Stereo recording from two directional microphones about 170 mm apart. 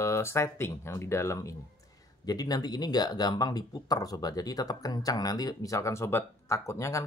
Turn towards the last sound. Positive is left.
turn(degrees=15)  # may be behind; listen again after turning